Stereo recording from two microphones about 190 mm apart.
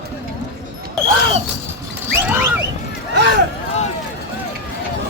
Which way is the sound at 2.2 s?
10° right (ahead or behind).